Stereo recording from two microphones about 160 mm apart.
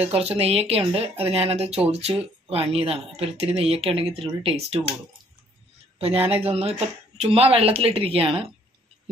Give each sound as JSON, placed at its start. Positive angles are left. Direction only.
{"t": 0.0, "sound": "speech", "side_deg": -40}
{"t": 5.9, "sound": "speech", "side_deg": -35}